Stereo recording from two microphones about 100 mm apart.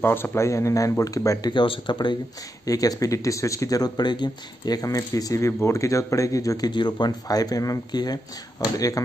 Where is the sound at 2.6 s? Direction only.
35° left (ahead or behind).